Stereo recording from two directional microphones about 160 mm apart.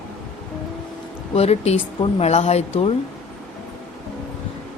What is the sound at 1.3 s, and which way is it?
A woman's voice, 40° left (ahead or behind).